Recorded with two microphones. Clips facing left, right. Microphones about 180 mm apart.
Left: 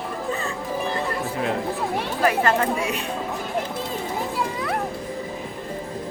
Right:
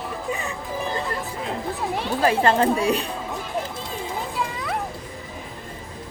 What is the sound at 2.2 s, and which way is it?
Speech, 30° right (ahead or behind).